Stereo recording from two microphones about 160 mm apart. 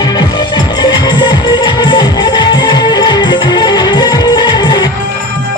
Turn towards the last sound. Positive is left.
turn(degrees=30)  # may be behind; listen again after turning